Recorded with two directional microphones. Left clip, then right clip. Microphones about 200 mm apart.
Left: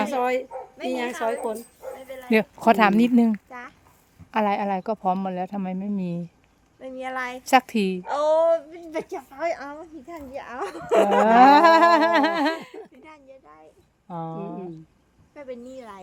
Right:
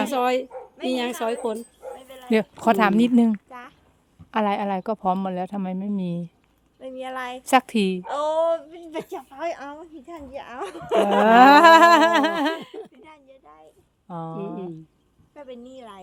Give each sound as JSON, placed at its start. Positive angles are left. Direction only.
{"t": 0.0, "sound": "bow-wow", "side_deg": -50}
{"t": 0.9, "sound": "speech", "side_deg": -50}
{"t": 2.0, "sound": "a sound", "side_deg": 5}
{"t": 4.3, "sound": "a woman's voice", "side_deg": -5}